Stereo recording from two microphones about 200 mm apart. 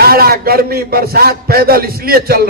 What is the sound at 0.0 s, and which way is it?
A man's voice, 50° right (ahead or behind).